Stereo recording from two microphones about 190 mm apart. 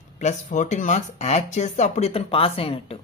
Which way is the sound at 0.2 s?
40° left (ahead or behind).